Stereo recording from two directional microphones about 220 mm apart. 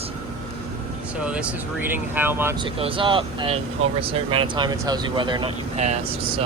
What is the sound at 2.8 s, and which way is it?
Speech, 25° right (ahead or behind).